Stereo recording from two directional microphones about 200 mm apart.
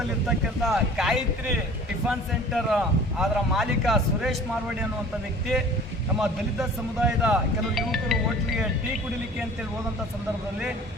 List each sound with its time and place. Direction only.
0.3 s speech: centre (ahead or behind)
6.1 s speech: 5° right (ahead or behind)